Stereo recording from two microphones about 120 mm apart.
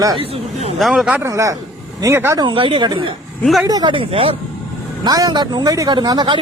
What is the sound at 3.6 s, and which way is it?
Speech, 30° right (ahead or behind).